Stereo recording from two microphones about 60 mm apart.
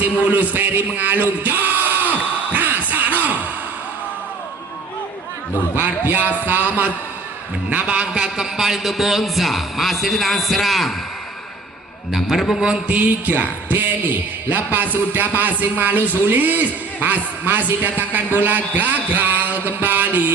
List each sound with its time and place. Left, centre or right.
0.3 s a sound: right
5.7 s a man's voice: right; by 10.9 s centre
12.1 s a man's voice: centre
12.9 s a man's voice: right